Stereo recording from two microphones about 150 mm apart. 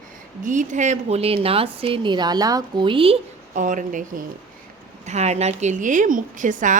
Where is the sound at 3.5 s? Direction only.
60° right (ahead or behind).